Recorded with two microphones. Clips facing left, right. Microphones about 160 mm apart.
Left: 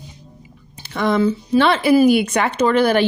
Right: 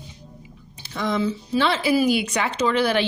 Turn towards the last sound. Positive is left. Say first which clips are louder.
# left 5 dB
turn(degrees=50)  # may be behind; listen again after turning